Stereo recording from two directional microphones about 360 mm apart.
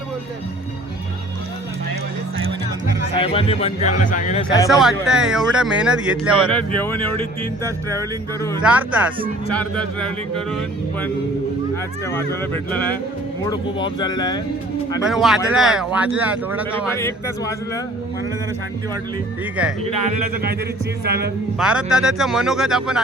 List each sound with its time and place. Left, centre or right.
3.2 s speech: centre
4.8 s speech: centre
8.6 s speech: centre
12.0 s speech: centre
15.0 s speech: centre
16.7 s speech: centre
21.0 s speech: right
21.6 s speech: centre